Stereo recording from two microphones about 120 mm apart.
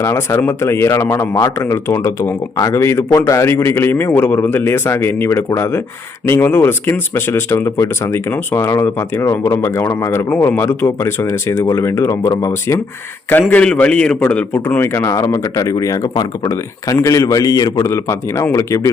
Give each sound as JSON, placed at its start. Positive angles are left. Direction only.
{"t": 0.0, "sound": "speech", "side_deg": 25}
{"t": 13.5, "sound": "a man's voice", "side_deg": 10}